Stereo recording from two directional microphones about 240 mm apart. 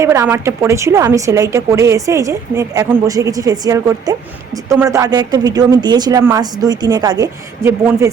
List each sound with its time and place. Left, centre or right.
0.0 s speech: centre